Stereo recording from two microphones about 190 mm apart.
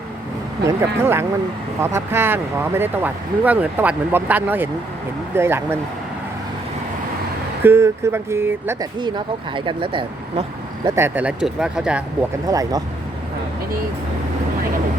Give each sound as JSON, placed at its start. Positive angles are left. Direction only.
{"t": 0.8, "sound": "speech", "side_deg": -10}
{"t": 7.6, "sound": "speech", "side_deg": -15}
{"t": 9.0, "sound": "speech", "side_deg": -25}
{"t": 10.8, "sound": "speech", "side_deg": -15}
{"t": 12.5, "sound": "speech", "side_deg": -20}